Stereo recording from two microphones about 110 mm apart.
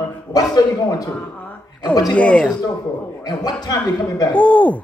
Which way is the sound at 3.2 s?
35° left (ahead or behind).